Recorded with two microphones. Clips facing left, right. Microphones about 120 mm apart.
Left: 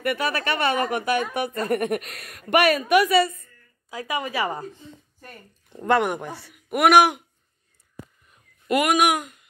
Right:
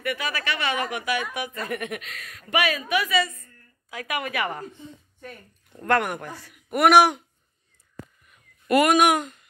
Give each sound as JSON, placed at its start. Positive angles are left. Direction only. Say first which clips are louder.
{"t": 0.0, "sound": "a woman's voice", "louder": "left 4 dB", "side_deg": 50}
{"t": 3.9, "sound": "a woman's voice", "louder": "left 2 dB", "side_deg": 25}
{"t": 5.7, "sound": "a woman's voice", "louder": "left 2 dB", "side_deg": 20}
{"t": 6.7, "sound": "speech", "louder": "even", "side_deg": 0}
{"t": 8.3, "sound": "a sound", "louder": "right 2 dB", "side_deg": 15}